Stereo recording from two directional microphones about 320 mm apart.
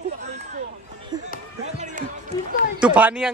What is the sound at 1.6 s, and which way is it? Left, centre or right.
Basketball bounce, right.